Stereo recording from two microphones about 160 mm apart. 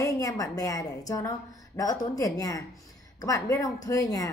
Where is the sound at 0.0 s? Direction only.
20° left (ahead or behind).